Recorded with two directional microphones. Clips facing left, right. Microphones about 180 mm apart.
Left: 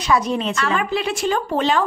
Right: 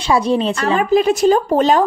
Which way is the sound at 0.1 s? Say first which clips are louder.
Right 4 dB; 30° right (ahead or behind).